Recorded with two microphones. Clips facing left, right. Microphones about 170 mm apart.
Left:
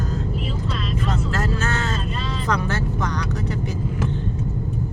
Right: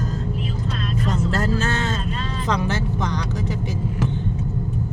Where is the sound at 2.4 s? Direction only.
20° right (ahead or behind).